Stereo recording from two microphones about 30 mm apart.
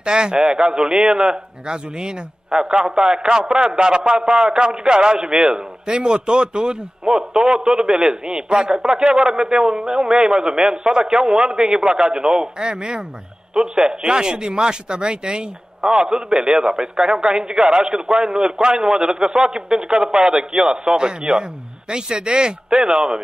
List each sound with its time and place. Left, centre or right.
0.0 s a man's voice: right
10.1 s a man's voice: right